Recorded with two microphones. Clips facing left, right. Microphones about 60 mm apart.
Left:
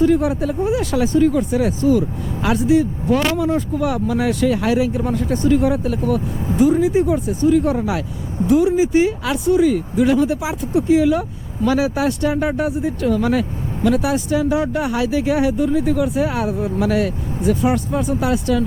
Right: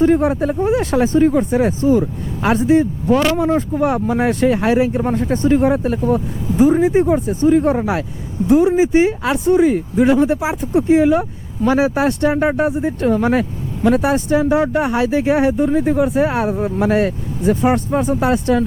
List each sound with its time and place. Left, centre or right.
0.0 s speech: right